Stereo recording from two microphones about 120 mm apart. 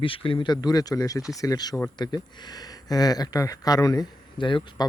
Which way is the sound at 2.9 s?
30° left (ahead or behind).